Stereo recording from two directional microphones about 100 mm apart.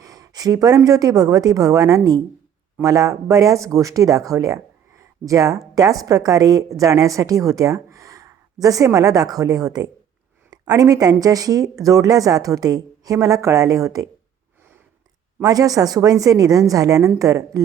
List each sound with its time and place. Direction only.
0.0 s a sound: 40° right (ahead or behind)
0.9 s speech: 40° right (ahead or behind)
15.4 s speech: 35° right (ahead or behind)